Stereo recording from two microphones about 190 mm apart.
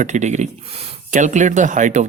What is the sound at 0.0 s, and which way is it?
Speech, 40° right (ahead or behind).